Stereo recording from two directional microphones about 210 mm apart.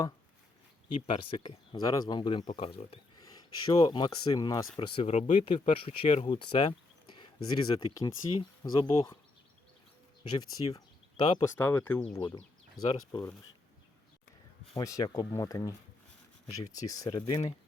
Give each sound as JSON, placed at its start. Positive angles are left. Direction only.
{"t": 1.0, "sound": "speech", "side_deg": 25}
{"t": 4.8, "sound": "speech", "side_deg": 30}
{"t": 10.3, "sound": "speech", "side_deg": 20}
{"t": 11.5, "sound": "speech", "side_deg": 10}
{"t": 14.8, "sound": "speech", "side_deg": 15}
{"t": 16.7, "sound": "speech", "side_deg": 15}